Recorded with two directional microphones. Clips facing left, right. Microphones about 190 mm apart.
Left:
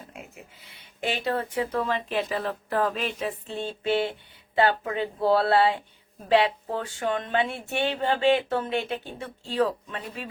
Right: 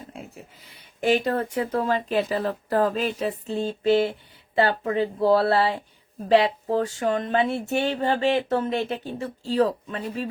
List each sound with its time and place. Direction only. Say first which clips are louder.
0.1 s speech: right 4 dB; 35° right (ahead or behind)